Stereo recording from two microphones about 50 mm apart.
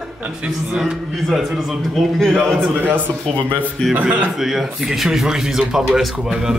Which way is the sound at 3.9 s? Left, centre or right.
Right.